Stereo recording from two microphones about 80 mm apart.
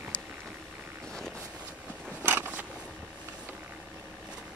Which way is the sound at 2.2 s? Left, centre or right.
Right.